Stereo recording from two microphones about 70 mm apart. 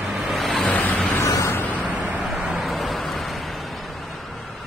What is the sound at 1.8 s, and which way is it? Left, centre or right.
Vehicle, right.